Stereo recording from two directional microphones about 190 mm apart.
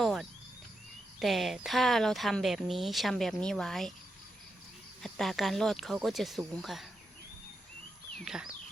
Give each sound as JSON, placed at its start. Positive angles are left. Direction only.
{"t": 0.0, "sound": "a sound", "side_deg": 0}
{"t": 1.2, "sound": "speech", "side_deg": 0}
{"t": 5.0, "sound": "speech", "side_deg": 0}
{"t": 8.2, "sound": "speech", "side_deg": -5}